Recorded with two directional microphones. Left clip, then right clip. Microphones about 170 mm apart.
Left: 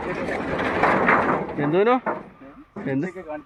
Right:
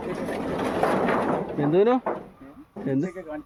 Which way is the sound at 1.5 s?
25° right (ahead or behind).